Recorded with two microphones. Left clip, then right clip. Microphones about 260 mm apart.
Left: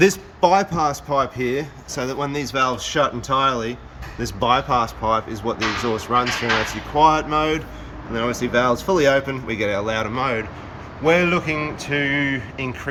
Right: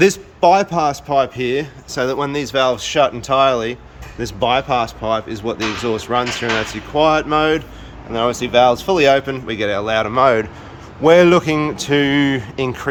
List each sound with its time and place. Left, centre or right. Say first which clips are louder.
0.3 s a man's voice: right 5 dB; centre
5.5 s a man's voice: right 2 dB; centre